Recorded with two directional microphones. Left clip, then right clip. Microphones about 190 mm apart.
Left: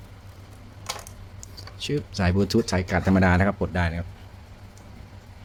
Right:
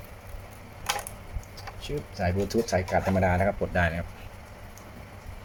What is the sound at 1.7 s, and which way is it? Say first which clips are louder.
Speech: left 6 dB; 50° left (ahead or behind).